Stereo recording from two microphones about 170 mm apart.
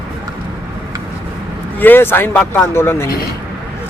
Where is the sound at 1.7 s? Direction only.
10° left (ahead or behind).